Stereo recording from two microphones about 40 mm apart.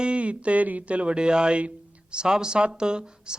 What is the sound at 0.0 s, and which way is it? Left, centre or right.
Speech, right.